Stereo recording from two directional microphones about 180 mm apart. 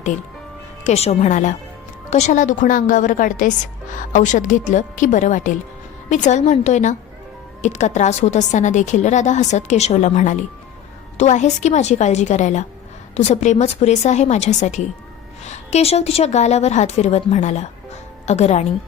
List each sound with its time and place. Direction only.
0.9 s a woman's voice: 35° left (ahead or behind)